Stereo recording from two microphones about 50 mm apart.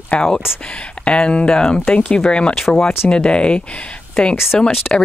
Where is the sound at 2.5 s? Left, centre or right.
Centre.